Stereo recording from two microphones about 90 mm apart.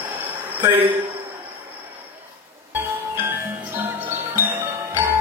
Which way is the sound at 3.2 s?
25° right (ahead or behind).